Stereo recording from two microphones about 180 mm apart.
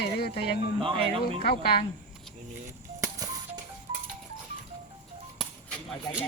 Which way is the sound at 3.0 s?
20° right (ahead or behind).